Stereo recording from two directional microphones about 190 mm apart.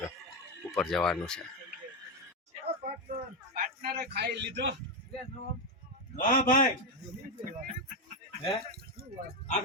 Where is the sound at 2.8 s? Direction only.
55° right (ahead or behind).